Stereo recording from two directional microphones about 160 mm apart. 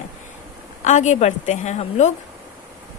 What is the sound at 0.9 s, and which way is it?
A woman's voice, 50° left (ahead or behind).